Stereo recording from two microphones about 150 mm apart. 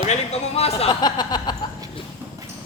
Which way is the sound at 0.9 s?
30° left (ahead or behind).